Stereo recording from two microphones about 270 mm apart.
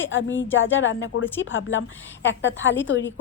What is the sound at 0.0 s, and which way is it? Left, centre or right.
A woman's voice, left.